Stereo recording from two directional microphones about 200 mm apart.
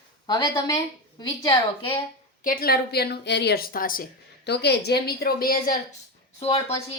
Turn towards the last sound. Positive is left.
turn(degrees=30)  # may be behind; listen again after turning